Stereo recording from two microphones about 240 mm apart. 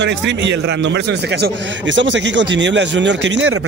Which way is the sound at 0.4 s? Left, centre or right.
Right.